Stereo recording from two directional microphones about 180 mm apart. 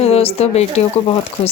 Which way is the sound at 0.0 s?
35° left (ahead or behind).